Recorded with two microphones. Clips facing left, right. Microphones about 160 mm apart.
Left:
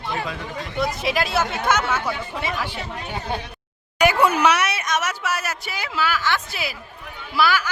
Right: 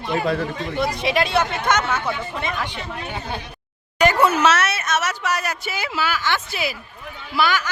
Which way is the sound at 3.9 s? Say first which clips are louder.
Right 1 dB; 10° left (ahead or behind).